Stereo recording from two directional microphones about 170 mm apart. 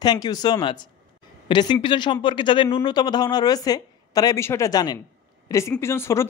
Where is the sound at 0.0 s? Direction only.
25° left (ahead or behind).